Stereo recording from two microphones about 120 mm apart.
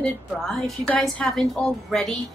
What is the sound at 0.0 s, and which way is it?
A woman's voice, 10° left (ahead or behind).